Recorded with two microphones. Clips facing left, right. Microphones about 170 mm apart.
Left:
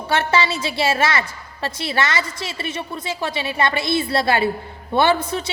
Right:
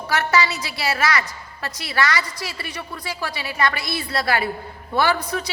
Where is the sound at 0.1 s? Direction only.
25° left (ahead or behind).